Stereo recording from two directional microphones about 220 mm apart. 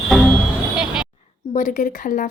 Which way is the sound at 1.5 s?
35° left (ahead or behind).